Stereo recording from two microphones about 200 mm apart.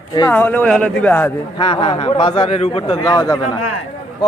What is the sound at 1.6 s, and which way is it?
A man's voice, 25° left (ahead or behind).